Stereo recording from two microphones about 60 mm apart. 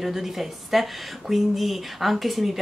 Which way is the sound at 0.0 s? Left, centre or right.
Centre.